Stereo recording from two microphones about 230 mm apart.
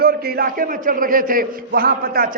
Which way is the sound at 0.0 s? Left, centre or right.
Right.